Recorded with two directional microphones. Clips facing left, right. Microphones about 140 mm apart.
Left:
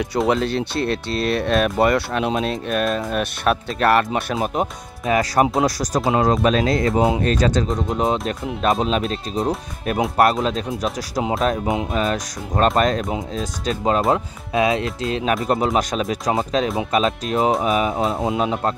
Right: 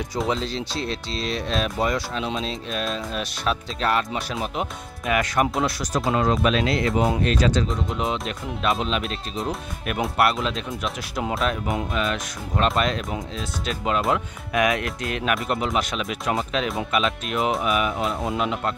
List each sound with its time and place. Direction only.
0.3 s speech: 60° left (ahead or behind)
5.0 s speech: 35° left (ahead or behind)
18.1 s speech: 25° left (ahead or behind)
18.4 s speech: 40° left (ahead or behind)